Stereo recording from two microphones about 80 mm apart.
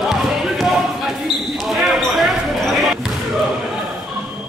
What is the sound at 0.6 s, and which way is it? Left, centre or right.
Basketball bounce, centre.